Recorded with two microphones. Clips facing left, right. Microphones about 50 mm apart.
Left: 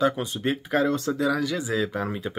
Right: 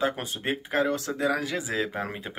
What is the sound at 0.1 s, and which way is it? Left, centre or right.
Speech, right.